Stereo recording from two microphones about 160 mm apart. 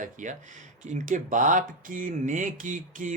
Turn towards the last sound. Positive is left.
turn(degrees=-55)  # may be behind; listen again after turning